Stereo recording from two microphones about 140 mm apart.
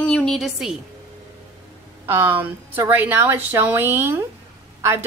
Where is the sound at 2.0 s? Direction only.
15° right (ahead or behind).